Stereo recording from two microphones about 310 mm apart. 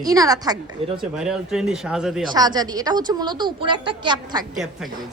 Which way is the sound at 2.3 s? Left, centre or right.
Centre.